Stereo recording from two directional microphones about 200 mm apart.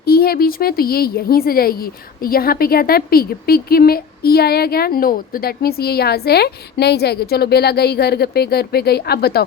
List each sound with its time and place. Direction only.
0.0 s a woman's voice: 50° left (ahead or behind)